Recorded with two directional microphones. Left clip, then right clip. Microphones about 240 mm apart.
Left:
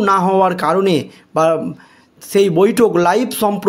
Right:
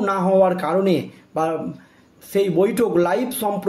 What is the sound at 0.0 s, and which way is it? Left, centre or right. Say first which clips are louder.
A man's voice: left 4 dB; left.